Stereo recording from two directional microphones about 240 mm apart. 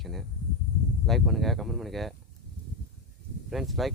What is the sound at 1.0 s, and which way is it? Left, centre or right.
Speech, centre.